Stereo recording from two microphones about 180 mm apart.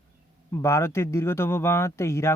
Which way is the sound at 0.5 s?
15° left (ahead or behind).